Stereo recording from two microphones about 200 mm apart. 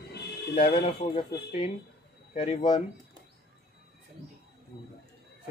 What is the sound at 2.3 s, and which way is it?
Speech, 25° left (ahead or behind).